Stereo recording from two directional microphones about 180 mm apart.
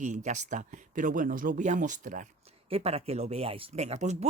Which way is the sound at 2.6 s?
35° right (ahead or behind).